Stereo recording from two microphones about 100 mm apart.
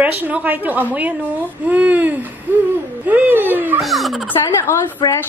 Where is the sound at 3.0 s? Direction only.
15° right (ahead or behind).